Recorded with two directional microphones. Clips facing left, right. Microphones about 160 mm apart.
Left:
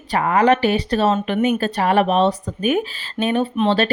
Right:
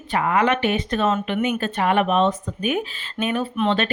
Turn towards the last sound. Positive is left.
turn(degrees=35)  # may be behind; listen again after turning